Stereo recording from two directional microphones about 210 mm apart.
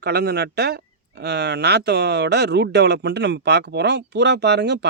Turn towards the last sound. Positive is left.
turn(degrees=-55)  # may be behind; listen again after turning